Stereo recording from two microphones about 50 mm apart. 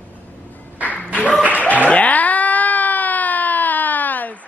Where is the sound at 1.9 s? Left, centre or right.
Left.